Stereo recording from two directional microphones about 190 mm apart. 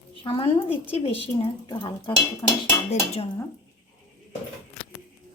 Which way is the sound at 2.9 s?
35° left (ahead or behind).